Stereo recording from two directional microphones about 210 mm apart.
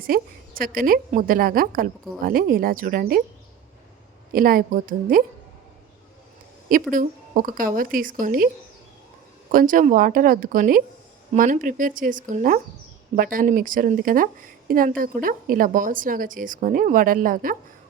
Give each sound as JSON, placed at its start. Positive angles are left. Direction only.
{"t": 0.1, "sound": "a woman's voice", "side_deg": -45}
{"t": 4.3, "sound": "a woman's voice", "side_deg": -45}
{"t": 6.9, "sound": "a woman's voice", "side_deg": -40}
{"t": 9.5, "sound": "a woman's voice", "side_deg": -40}